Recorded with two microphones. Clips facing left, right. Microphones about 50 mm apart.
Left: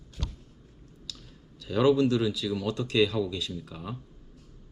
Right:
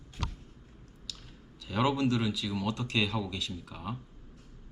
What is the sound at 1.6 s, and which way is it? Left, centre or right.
Speech, centre.